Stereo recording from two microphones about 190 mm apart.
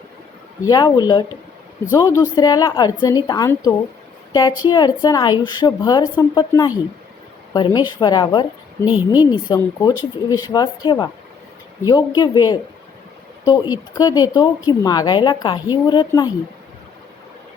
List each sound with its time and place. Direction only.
0.7 s a woman's voice: 20° left (ahead or behind)
8.9 s a woman's voice: 10° right (ahead or behind)
9.2 s a woman's voice: 20° left (ahead or behind)